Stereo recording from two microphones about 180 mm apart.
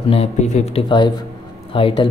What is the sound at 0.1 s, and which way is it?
Speech, 35° left (ahead or behind).